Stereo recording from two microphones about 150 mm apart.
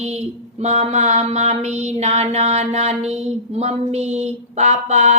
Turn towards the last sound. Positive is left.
turn(degrees=-50)  # may be behind; listen again after turning